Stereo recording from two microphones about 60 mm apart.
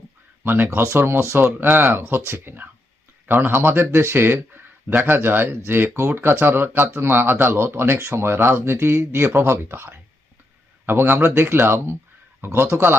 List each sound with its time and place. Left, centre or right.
0.4 s a man's voice: right